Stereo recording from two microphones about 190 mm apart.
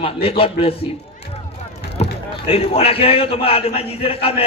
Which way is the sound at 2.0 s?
30° left (ahead or behind).